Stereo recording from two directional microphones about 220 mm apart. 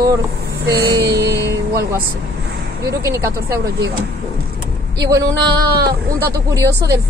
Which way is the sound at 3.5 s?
45° right (ahead or behind).